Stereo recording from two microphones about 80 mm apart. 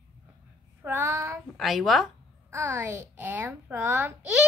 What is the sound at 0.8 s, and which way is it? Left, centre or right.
Speech, right.